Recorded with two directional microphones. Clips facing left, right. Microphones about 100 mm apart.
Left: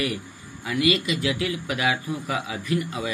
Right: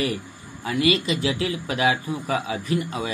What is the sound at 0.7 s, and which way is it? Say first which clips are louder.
A man's voice: right 1 dB; 30° right (ahead or behind).